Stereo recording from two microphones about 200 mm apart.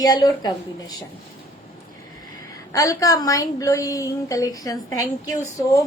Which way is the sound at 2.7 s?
15° left (ahead or behind).